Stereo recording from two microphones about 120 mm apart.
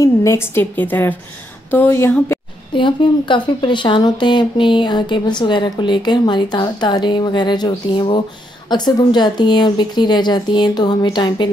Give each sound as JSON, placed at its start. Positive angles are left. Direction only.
{"t": 0.0, "sound": "a woman's voice", "side_deg": 25}
{"t": 2.7, "sound": "speech", "side_deg": 45}